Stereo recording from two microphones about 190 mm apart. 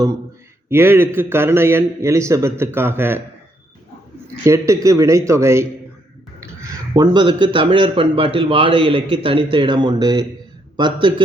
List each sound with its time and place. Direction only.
0.7 s a man's voice: 10° right (ahead or behind)
4.4 s a man's voice: 15° right (ahead or behind)